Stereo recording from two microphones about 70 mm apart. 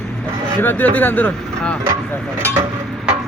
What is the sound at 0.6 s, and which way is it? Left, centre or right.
Speech, left.